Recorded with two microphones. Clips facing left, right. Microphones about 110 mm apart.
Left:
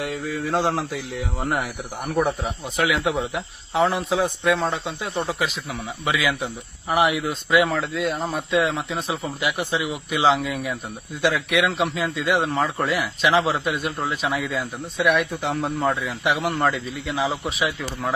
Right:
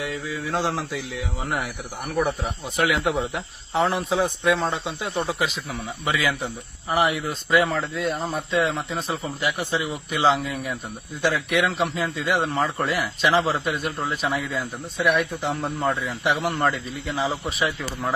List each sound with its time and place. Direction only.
0.0 s mantra: 60° left (ahead or behind)
0.9 s speech: centre (ahead or behind)